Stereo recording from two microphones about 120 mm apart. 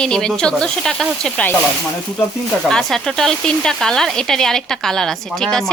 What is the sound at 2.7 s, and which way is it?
Speech, 5° left (ahead or behind).